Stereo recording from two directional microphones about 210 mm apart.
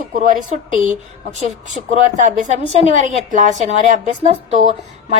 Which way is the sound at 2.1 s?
35° right (ahead or behind).